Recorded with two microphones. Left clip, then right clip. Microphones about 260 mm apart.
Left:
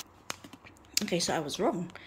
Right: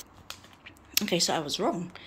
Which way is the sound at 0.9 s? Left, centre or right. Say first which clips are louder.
Right 3 dB; centre.